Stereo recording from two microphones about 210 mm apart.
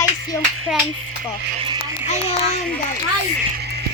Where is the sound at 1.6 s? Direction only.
20° right (ahead or behind).